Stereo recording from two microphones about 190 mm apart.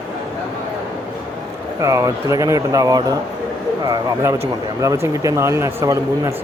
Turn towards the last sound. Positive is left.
turn(degrees=-15)  # may be behind; listen again after turning